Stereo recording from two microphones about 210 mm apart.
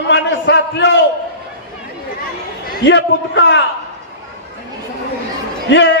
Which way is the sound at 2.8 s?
55° left (ahead or behind).